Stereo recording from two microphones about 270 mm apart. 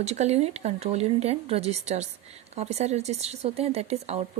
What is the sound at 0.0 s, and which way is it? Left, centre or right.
Speech, right.